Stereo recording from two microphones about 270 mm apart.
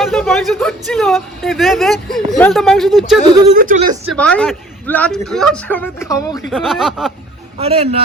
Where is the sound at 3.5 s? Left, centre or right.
Right.